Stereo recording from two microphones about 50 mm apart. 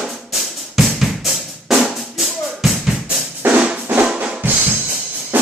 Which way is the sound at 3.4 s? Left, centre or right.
Right.